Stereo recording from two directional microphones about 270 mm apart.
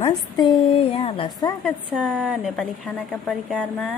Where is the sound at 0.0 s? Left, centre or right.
Centre.